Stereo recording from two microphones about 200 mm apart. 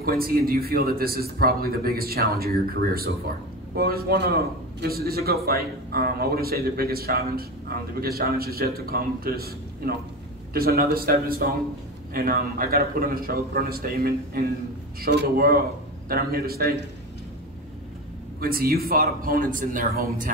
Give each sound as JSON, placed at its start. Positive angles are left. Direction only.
{"t": 0.0, "sound": "a man's voice", "side_deg": -50}
{"t": 18.4, "sound": "a man's voice", "side_deg": -50}